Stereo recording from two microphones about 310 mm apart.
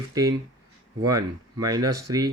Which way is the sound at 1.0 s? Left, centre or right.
Centre.